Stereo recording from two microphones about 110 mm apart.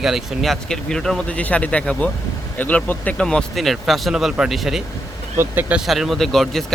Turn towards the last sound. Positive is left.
turn(degrees=5)  # may be behind; listen again after turning